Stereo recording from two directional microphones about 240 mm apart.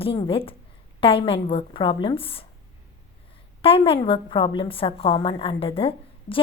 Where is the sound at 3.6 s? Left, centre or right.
Left.